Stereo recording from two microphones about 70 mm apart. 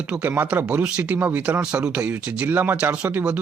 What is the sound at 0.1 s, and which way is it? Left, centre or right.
Speech, right.